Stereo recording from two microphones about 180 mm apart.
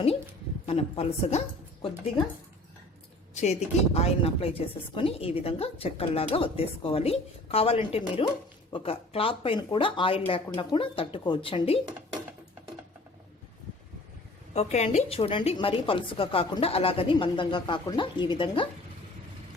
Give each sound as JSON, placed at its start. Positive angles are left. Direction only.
{"t": 0.7, "sound": "a woman's voice", "side_deg": 35}
{"t": 3.4, "sound": "a woman's voice", "side_deg": 35}
{"t": 14.5, "sound": "a woman's voice", "side_deg": 40}